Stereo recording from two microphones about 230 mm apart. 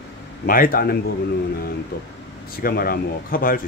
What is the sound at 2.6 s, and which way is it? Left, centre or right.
Speech, left.